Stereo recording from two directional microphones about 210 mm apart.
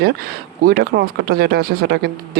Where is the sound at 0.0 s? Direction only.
45° right (ahead or behind).